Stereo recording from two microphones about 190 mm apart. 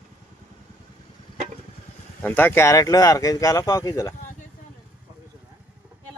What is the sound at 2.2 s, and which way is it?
Speech, 10° left (ahead or behind).